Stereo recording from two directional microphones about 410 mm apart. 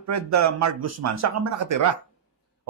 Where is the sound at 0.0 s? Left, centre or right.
Right.